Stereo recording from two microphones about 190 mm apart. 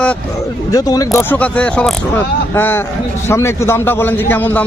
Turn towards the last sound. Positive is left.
turn(degrees=10)  # may be behind; listen again after turning